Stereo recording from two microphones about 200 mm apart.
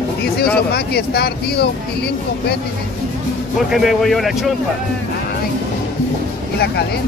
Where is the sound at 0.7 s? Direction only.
55° left (ahead or behind).